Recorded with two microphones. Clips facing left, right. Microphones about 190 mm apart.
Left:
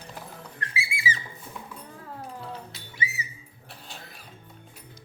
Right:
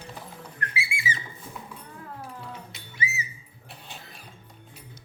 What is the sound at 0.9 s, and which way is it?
Music, 35° left (ahead or behind).